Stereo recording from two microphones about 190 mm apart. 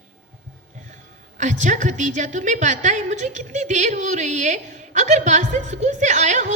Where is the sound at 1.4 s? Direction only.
40° right (ahead or behind).